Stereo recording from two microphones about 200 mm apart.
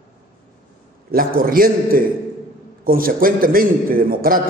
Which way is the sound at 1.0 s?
45° right (ahead or behind).